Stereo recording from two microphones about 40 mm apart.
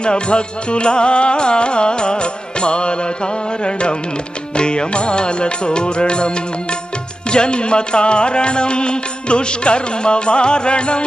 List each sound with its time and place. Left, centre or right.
0.0 s music: left